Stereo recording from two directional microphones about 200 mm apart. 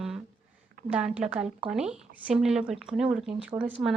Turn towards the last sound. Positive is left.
turn(degrees=0)  # may be behind; listen again after turning